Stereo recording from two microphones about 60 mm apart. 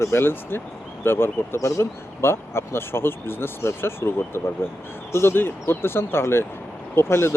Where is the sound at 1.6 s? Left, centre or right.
Left.